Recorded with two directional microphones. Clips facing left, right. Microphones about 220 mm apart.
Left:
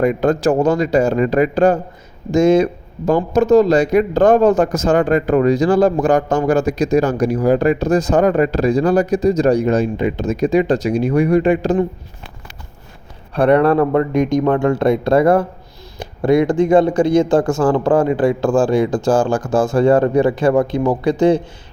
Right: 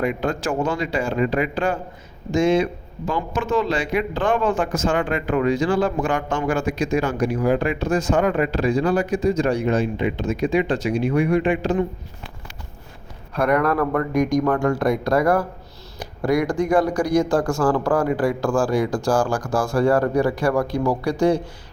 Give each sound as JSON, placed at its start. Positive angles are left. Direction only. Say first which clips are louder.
{"t": 0.0, "sound": "speech", "louder": "left 8 dB", "side_deg": 40}
{"t": 13.3, "sound": "speech", "louder": "left 7 dB", "side_deg": 30}